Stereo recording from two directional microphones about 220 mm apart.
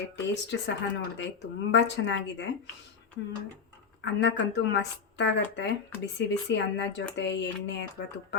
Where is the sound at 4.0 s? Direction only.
55° left (ahead or behind).